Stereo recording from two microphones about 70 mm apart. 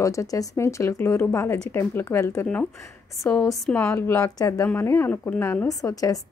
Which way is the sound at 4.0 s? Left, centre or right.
Left.